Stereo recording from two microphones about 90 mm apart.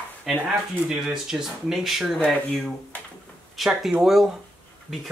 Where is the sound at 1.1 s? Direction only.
5° right (ahead or behind).